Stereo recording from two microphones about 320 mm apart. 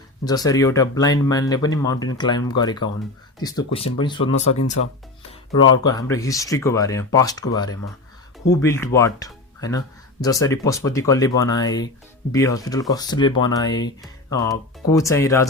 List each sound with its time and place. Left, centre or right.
0.3 s speech: centre
5.7 s speech: centre